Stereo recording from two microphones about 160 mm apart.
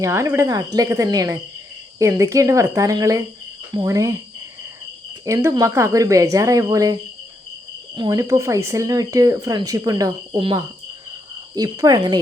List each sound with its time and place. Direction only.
0.0 s speech: 20° right (ahead or behind)
5.2 s speech: 15° right (ahead or behind)